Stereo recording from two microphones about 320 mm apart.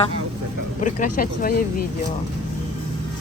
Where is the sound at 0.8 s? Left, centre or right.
Left.